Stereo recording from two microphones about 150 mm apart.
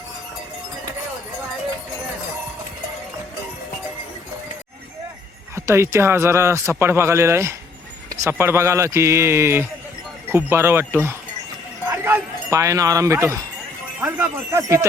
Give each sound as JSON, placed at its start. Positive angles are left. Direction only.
{"t": 5.5, "sound": "a man's voice", "side_deg": -15}
{"t": 14.0, "sound": "jingle bell", "side_deg": -15}